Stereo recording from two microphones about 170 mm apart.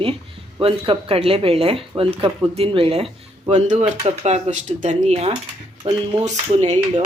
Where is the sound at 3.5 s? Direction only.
45° right (ahead or behind).